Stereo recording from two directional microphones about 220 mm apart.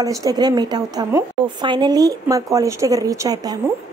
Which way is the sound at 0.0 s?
15° right (ahead or behind).